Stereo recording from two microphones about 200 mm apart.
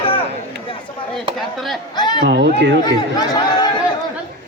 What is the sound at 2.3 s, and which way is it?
Speech, 55° right (ahead or behind).